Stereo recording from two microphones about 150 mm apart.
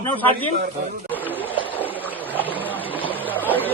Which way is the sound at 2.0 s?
10° right (ahead or behind).